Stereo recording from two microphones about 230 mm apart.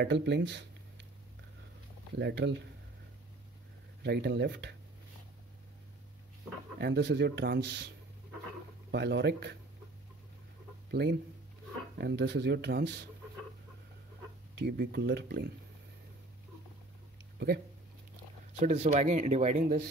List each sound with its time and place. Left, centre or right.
0.0 s speech: right
2.1 s speech: right
4.0 s speech: right
6.8 s speech: right
8.9 s speech: right
10.9 s speech: right
14.5 s speech: right
18.6 s speech: right